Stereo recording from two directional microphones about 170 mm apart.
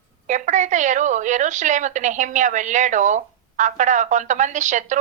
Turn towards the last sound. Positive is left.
turn(degrees=-45)  # may be behind; listen again after turning